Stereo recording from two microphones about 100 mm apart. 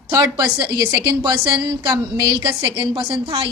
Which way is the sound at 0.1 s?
35° right (ahead or behind).